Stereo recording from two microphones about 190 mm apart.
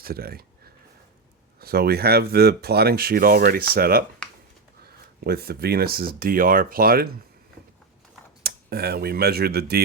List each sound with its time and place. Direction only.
0.0 s speech: 50° right (ahead or behind)
4.2 s a sound: 5° left (ahead or behind)
5.2 s speech: 55° right (ahead or behind)
8.4 s speech: 55° right (ahead or behind)